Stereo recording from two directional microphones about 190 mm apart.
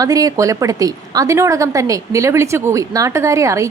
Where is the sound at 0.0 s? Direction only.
20° right (ahead or behind).